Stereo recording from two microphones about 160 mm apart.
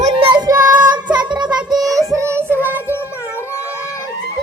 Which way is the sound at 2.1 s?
15° right (ahead or behind).